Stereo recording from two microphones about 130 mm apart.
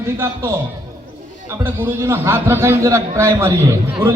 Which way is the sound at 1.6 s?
20° right (ahead or behind).